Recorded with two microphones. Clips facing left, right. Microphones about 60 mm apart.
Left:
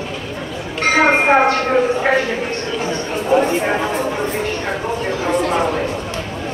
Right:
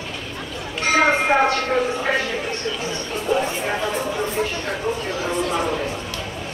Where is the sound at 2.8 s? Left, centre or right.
Left.